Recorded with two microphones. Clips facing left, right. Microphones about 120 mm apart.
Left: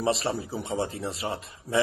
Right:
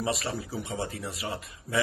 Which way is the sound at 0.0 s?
30° left (ahead or behind).